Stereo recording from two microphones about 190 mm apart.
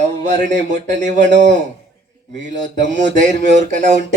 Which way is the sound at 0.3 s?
40° right (ahead or behind).